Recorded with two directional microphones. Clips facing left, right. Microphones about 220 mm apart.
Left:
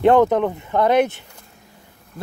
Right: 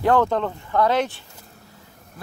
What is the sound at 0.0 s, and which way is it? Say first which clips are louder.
Speech: left 5 dB; 20° left (ahead or behind).